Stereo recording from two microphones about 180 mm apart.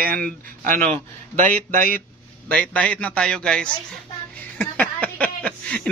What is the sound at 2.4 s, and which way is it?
A man's voice, 10° left (ahead or behind).